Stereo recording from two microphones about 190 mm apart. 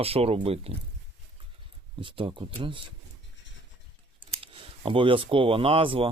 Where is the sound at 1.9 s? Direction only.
25° right (ahead or behind).